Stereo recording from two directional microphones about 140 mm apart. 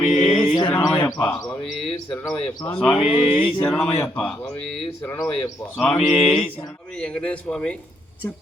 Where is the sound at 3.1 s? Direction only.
40° left (ahead or behind).